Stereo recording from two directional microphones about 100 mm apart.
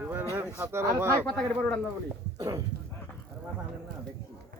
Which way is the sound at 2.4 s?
35° right (ahead or behind).